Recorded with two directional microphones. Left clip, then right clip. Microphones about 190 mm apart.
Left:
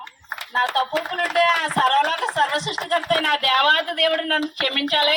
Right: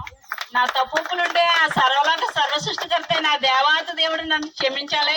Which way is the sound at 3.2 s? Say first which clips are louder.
Even; 30° left (ahead or behind).